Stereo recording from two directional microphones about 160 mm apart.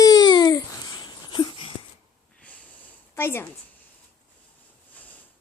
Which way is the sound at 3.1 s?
15° left (ahead or behind).